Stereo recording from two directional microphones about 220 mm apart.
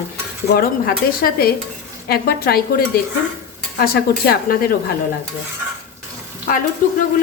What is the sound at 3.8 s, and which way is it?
Speech, 45° left (ahead or behind).